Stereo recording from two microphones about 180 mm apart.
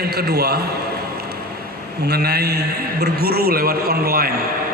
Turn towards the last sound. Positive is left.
turn(degrees=-55)  # may be behind; listen again after turning